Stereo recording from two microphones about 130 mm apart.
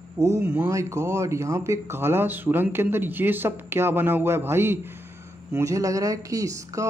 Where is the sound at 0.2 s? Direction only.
20° right (ahead or behind).